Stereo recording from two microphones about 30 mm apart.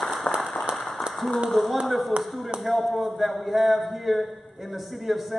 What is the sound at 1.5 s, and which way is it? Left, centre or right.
A man's voice, centre.